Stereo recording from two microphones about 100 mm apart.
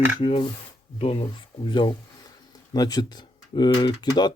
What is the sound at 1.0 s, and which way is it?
Speech, 75° left (ahead or behind).